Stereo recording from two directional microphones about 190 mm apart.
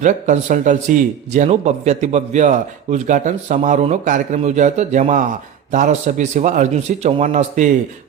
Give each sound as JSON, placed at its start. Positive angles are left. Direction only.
{"t": 0.0, "sound": "a man's voice", "side_deg": -40}